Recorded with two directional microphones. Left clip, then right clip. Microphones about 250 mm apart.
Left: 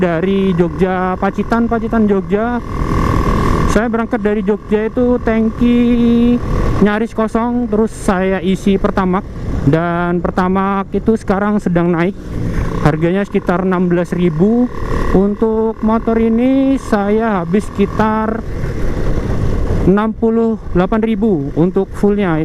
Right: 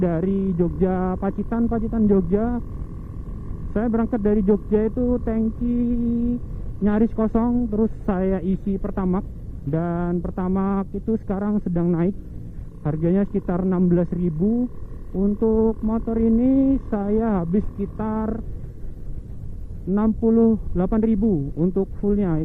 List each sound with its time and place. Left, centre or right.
0.0 s speech: centre
3.8 s speech: centre
15.2 s speech: centre
15.9 s speech: centre
19.9 s speech: centre